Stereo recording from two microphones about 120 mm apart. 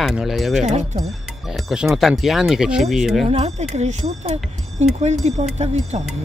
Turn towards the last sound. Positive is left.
turn(degrees=-70)  # may be behind; listen again after turning